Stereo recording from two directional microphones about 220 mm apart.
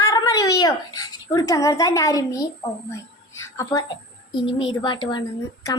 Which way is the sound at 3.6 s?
15° left (ahead or behind).